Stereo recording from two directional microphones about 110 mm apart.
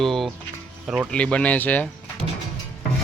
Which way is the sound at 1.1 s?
10° left (ahead or behind).